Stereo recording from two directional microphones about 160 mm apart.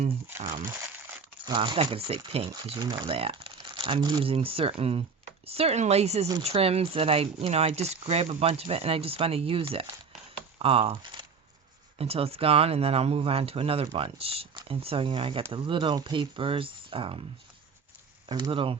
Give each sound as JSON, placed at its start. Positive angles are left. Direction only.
{"t": 1.5, "sound": "speech", "side_deg": -30}
{"t": 2.7, "sound": "speech", "side_deg": -25}
{"t": 18.3, "sound": "speech", "side_deg": -30}